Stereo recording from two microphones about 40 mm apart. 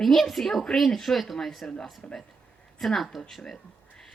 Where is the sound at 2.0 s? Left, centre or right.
Left.